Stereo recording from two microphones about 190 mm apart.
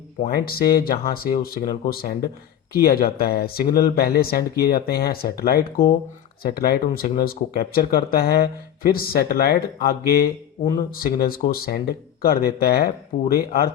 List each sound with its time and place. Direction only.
0.3 s speech: 55° left (ahead or behind)